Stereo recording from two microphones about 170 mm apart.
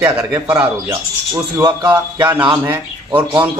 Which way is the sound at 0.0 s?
15° right (ahead or behind).